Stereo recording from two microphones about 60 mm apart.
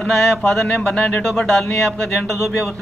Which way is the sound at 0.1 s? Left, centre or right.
Centre.